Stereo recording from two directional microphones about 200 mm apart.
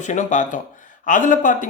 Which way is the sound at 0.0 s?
35° left (ahead or behind).